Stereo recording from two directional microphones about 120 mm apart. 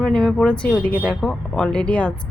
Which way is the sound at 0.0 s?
5° left (ahead or behind).